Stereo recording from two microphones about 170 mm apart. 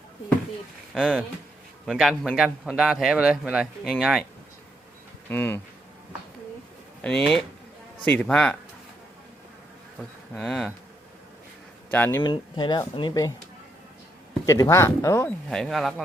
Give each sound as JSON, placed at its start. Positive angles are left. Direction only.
{"t": 0.9, "sound": "a man's voice", "side_deg": 0}
{"t": 5.3, "sound": "speech", "side_deg": 10}
{"t": 7.0, "sound": "a man's voice", "side_deg": 5}
{"t": 10.0, "sound": "a man's voice", "side_deg": 0}
{"t": 11.9, "sound": "speech", "side_deg": 10}
{"t": 12.2, "sound": "speech", "side_deg": 25}
{"t": 14.4, "sound": "speech", "side_deg": 15}
{"t": 15.4, "sound": "a man's voice", "side_deg": 0}